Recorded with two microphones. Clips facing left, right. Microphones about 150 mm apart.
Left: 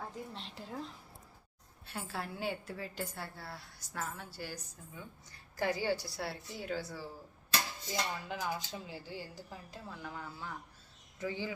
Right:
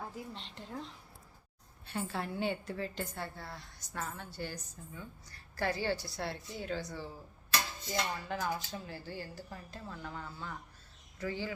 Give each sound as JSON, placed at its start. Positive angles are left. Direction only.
{"t": 0.0, "sound": "a woman's voice", "side_deg": 0}
{"t": 8.3, "sound": "a woman's voice", "side_deg": 10}
{"t": 11.2, "sound": "a woman's voice", "side_deg": 15}